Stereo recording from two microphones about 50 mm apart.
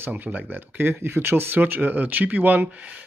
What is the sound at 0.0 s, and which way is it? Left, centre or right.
Speech, right.